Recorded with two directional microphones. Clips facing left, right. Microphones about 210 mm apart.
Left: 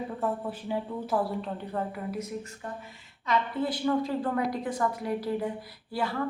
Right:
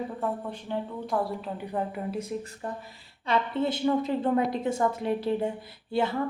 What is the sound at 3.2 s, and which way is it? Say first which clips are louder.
A woman's voice: right 2 dB; 25° right (ahead or behind).